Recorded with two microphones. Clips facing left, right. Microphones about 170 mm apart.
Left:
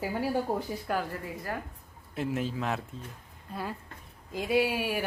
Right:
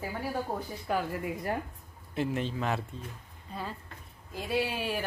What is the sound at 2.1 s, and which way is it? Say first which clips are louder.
Speech: even; centre (ahead or behind).